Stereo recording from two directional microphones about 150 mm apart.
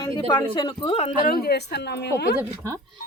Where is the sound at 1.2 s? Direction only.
90° left.